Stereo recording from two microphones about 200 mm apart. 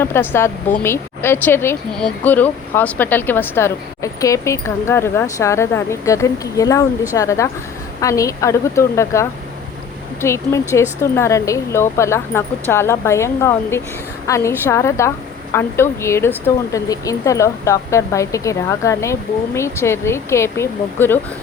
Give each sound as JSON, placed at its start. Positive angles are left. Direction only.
{"t": 0.0, "sound": "speech", "side_deg": 10}